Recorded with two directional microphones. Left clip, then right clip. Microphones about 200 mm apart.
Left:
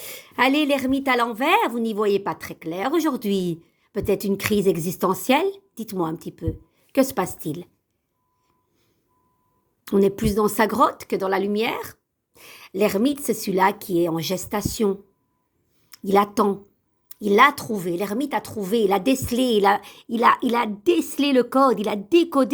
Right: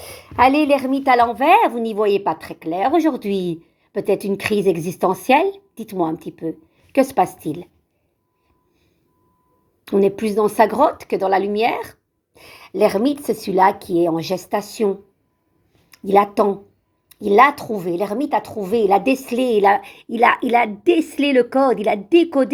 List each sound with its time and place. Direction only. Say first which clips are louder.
0.0 s a woman's voice: right 6 dB; 50° left (ahead or behind)
9.8 s a woman's voice: right 3 dB; 50° left (ahead or behind)
15.9 s a woman's voice: right 4 dB; 50° left (ahead or behind)